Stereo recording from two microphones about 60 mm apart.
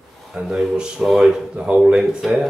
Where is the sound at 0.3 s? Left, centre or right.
Centre.